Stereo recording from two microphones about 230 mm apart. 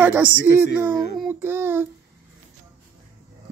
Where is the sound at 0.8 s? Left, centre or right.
Centre.